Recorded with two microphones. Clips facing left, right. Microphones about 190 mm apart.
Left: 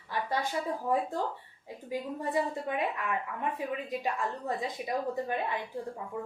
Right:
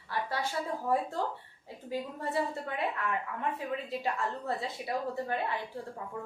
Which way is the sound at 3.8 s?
15° left (ahead or behind).